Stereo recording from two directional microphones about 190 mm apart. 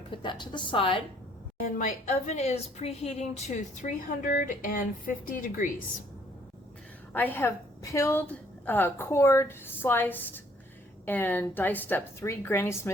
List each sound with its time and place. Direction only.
0.1 s a woman's voice: 25° left (ahead or behind)
1.6 s a woman's voice: 40° left (ahead or behind)
7.1 s a woman's voice: 10° left (ahead or behind)